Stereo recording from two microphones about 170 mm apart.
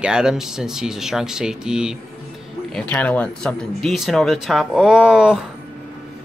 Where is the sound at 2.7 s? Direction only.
10° left (ahead or behind).